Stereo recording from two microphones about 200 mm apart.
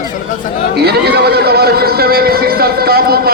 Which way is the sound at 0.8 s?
55° right (ahead or behind).